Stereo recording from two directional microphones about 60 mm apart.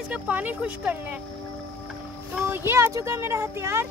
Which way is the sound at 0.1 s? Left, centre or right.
Right.